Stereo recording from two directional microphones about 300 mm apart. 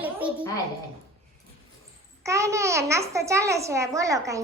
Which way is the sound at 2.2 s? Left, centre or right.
Centre.